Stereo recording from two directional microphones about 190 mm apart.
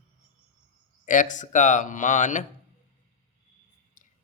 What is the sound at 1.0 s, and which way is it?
A man's voice, 40° left (ahead or behind).